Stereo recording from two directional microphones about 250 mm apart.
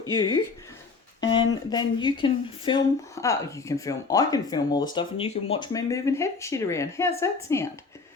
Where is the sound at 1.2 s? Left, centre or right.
Left.